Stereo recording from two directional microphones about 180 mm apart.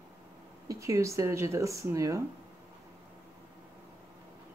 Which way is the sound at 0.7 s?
15° right (ahead or behind).